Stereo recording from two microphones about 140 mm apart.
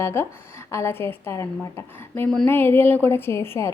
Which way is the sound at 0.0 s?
20° left (ahead or behind).